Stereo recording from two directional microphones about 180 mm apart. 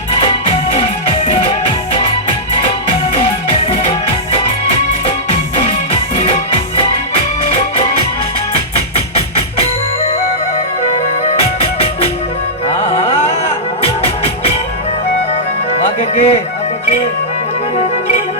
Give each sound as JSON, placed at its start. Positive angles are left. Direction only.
{"t": 5.9, "sound": "music", "side_deg": 35}
{"t": 12.6, "sound": "music", "side_deg": 35}
{"t": 15.8, "sound": "music", "side_deg": 35}